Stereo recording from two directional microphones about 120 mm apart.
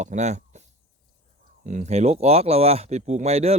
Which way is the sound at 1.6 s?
80° right.